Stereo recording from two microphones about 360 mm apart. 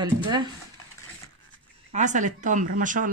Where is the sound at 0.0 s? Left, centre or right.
Centre.